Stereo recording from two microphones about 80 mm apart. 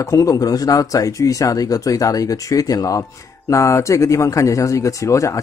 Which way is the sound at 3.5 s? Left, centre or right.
Left.